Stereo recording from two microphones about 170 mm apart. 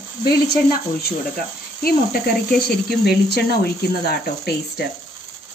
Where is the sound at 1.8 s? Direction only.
60° left (ahead or behind).